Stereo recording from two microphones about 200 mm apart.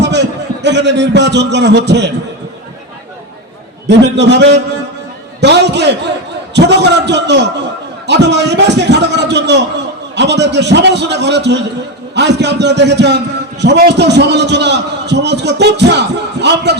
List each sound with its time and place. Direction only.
0.0 s a man's voice: 60° right (ahead or behind)
3.8 s a man's voice: 60° right (ahead or behind)